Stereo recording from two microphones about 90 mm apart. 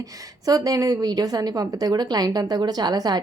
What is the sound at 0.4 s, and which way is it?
A woman's voice, 45° right (ahead or behind).